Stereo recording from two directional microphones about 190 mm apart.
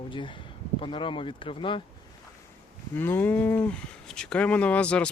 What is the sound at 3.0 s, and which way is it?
Speech, 10° left (ahead or behind).